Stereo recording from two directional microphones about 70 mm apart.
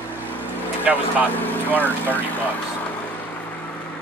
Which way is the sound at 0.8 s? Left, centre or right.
Right.